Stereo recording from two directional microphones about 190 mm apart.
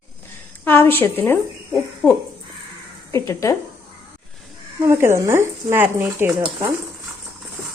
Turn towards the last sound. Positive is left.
turn(degrees=-10)  # may be behind; listen again after turning